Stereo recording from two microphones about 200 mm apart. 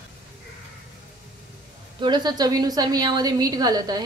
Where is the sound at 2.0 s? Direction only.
20° right (ahead or behind).